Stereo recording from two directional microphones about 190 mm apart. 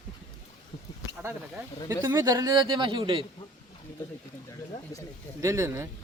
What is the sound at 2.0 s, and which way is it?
Speech, 15° right (ahead or behind).